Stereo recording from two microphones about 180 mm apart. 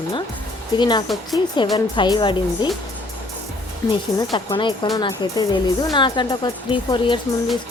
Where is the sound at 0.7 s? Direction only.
25° left (ahead or behind).